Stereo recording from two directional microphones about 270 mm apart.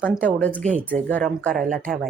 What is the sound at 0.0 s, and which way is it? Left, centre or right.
Speech, centre.